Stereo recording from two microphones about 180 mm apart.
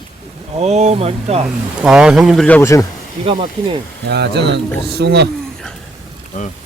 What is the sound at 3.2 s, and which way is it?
Speech, 30° right (ahead or behind).